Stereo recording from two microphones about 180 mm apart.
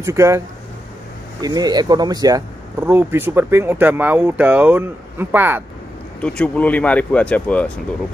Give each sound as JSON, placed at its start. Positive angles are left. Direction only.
{"t": 0.0, "sound": "speech", "side_deg": -15}
{"t": 1.4, "sound": "speech", "side_deg": -20}
{"t": 6.2, "sound": "speech", "side_deg": 5}